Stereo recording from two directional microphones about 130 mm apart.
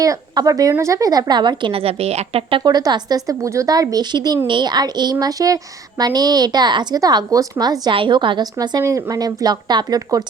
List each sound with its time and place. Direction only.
0.0 s speech: 25° right (ahead or behind)